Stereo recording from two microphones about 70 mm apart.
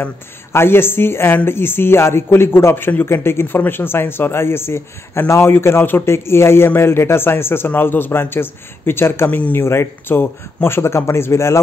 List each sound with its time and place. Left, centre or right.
0.0 s a man's voice: left
9.3 s a man's voice: left